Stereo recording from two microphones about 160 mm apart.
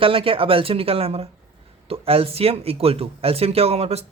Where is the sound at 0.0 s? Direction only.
35° right (ahead or behind).